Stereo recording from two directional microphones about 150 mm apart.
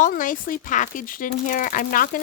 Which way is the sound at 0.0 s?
60° left (ahead or behind).